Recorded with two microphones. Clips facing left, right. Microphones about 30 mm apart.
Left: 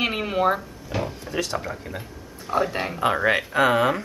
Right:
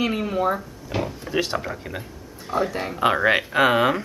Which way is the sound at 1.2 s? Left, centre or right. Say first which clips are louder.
Right 3 dB; centre.